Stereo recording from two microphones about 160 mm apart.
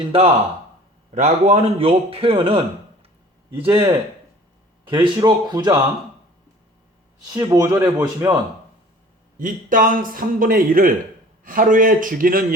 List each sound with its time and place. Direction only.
0.1 s a man's voice: 40° right (ahead or behind)
5.1 s speech: 25° right (ahead or behind)
7.3 s speech: 20° right (ahead or behind)
9.4 s a man's voice: 60° right (ahead or behind)